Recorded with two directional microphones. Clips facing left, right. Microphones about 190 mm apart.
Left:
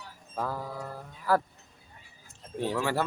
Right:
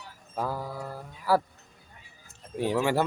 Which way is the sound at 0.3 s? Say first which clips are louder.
Right 2 dB; 10° right (ahead or behind).